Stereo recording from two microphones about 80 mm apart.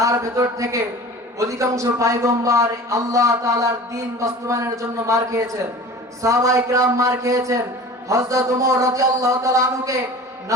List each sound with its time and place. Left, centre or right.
0.0 s a man's voice: right